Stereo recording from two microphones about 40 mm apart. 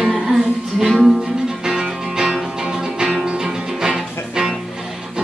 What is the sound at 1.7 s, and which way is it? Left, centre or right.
Music, centre.